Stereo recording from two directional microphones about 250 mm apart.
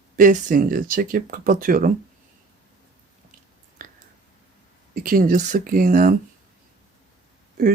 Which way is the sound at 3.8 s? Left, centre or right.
Right.